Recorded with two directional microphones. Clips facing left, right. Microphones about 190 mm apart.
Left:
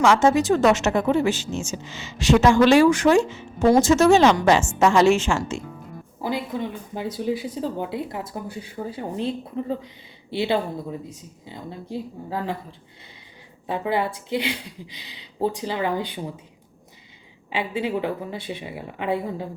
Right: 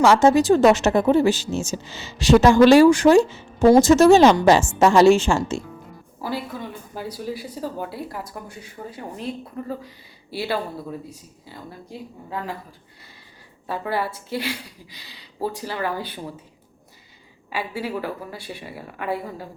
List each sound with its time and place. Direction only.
0.0 s a woman's voice: 35° right (ahead or behind)
6.2 s speech: 20° left (ahead or behind)
13.7 s speech: 20° left (ahead or behind)
17.5 s speech: 20° left (ahead or behind)